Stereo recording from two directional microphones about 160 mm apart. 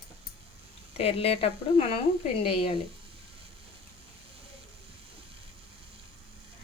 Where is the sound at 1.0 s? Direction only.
40° left (ahead or behind).